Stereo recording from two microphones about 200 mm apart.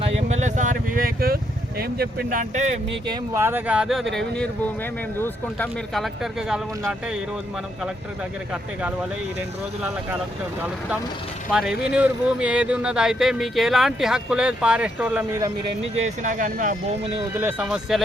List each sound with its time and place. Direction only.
0.2 s vehicle: 35° right (ahead or behind)
1.8 s speech: 50° right (ahead or behind)
3.1 s speech: 10° right (ahead or behind)
11.5 s speech: 5° right (ahead or behind)
15.8 s speech: 35° right (ahead or behind)
17.2 s speech: 10° right (ahead or behind)